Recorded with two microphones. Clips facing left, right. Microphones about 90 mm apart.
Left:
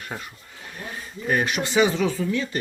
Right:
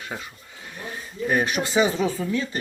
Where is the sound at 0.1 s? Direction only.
5° left (ahead or behind).